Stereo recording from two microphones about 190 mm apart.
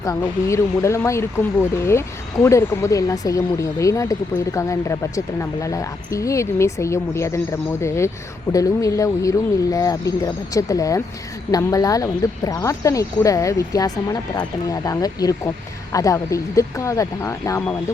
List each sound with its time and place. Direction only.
0.0 s speech: 15° left (ahead or behind)